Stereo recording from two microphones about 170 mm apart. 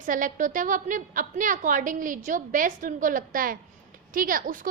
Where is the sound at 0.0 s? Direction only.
50° right (ahead or behind).